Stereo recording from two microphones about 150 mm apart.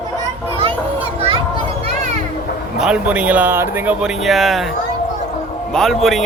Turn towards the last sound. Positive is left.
turn(degrees=0)  # may be behind; listen again after turning